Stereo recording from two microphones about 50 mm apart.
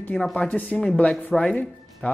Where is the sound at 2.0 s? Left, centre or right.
Left.